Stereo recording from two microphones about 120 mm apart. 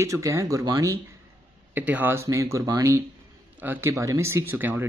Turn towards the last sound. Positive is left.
turn(degrees=-15)  # may be behind; listen again after turning